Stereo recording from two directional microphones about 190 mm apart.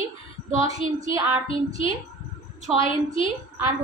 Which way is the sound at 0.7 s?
20° right (ahead or behind).